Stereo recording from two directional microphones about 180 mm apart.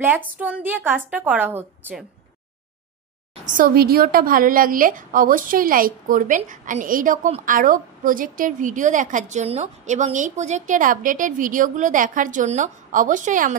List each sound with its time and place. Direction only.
0.0 s a woman's voice: 10° right (ahead or behind)
3.4 s a woman's voice: 50° right (ahead or behind)